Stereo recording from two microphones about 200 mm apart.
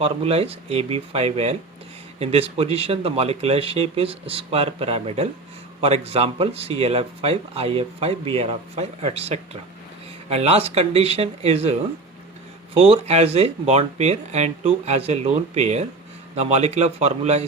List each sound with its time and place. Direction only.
0.0 s speech: 30° right (ahead or behind)